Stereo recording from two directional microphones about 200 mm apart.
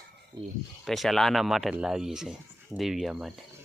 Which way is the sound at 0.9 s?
Centre (ahead or behind).